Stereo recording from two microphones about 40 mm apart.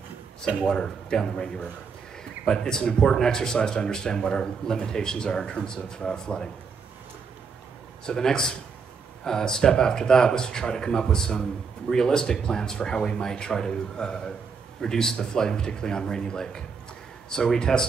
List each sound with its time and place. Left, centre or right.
0.6 s speech: centre
8.0 s speech: centre